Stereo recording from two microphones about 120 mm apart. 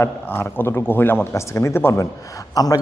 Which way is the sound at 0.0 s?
20° left (ahead or behind).